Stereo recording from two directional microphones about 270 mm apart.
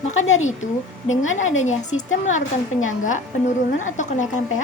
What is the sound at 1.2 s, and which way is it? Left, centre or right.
Speech, left.